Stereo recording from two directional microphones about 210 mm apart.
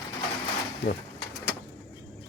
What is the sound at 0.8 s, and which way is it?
Pigeon, 50° left (ahead or behind).